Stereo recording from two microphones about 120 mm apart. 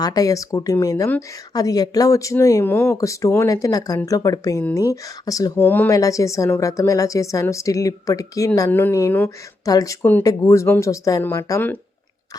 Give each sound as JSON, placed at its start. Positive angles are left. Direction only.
{"t": 0.0, "sound": "a woman's voice", "side_deg": 30}
{"t": 5.5, "sound": "speech", "side_deg": 15}
{"t": 5.9, "sound": "a woman's voice", "side_deg": 30}
{"t": 9.6, "sound": "a woman's voice", "side_deg": 30}